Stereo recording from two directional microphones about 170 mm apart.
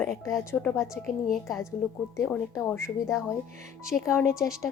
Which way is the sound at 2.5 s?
15° left (ahead or behind).